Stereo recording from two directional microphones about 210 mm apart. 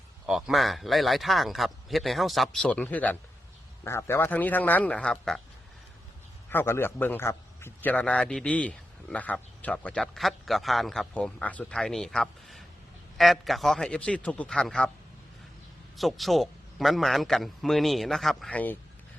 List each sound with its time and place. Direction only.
0.3 s a man's voice: centre (ahead or behind)
6.5 s a man's voice: 10° left (ahead or behind)
16.0 s a man's voice: centre (ahead or behind)